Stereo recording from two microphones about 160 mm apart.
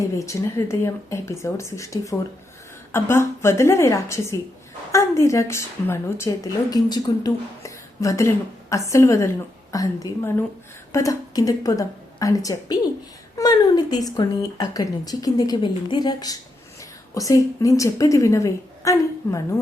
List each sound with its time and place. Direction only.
0.2 s a woman's voice: 20° left (ahead or behind)